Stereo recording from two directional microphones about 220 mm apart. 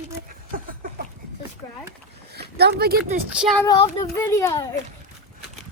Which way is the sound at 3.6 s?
15° left (ahead or behind).